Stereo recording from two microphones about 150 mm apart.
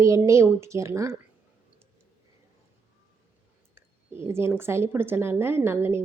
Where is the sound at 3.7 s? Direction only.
15° right (ahead or behind).